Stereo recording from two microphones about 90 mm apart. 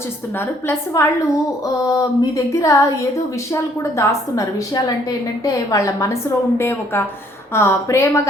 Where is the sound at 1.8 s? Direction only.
40° left (ahead or behind).